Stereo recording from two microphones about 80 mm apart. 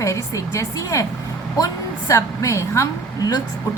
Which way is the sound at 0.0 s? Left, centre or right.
Left.